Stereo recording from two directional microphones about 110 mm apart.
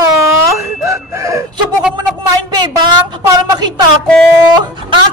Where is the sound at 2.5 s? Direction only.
45° right (ahead or behind).